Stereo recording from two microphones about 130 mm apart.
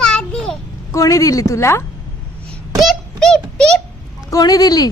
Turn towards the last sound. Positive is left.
turn(degrees=30)  # may be behind; listen again after turning